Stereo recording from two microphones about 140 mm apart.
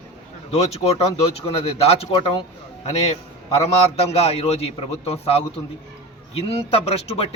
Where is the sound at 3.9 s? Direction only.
45° left (ahead or behind).